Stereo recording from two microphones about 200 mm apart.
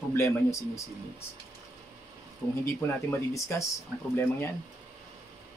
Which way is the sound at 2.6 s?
15° left (ahead or behind).